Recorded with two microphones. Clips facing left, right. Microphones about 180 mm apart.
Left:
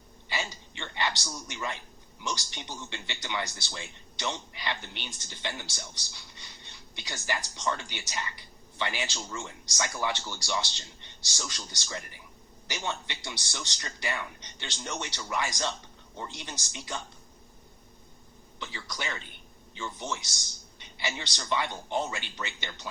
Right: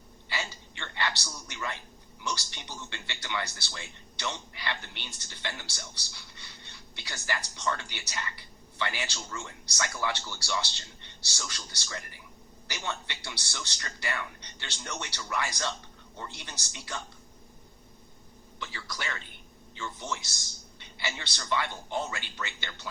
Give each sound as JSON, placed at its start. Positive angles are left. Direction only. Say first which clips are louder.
{"t": 0.3, "sound": "a sound", "louder": "left 2 dB", "side_deg": 20}
{"t": 2.2, "sound": "speech", "louder": "left 1 dB", "side_deg": 15}
{"t": 18.6, "sound": "speech", "louder": "left 1 dB", "side_deg": 20}